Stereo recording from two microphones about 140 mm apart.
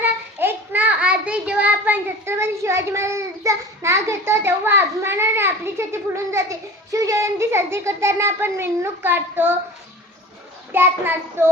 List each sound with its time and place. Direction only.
0.0 s a child's voice: 15° right (ahead or behind)
10.7 s a child's voice: 15° right (ahead or behind)